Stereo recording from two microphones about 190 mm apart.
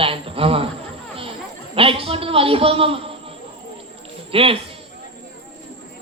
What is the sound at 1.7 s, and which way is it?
Speech, 30° right (ahead or behind).